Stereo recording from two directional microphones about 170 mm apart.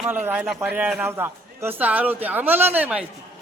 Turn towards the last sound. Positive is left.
turn(degrees=-10)  # may be behind; listen again after turning